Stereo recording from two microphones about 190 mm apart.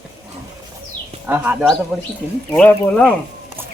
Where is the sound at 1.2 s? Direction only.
10° right (ahead or behind).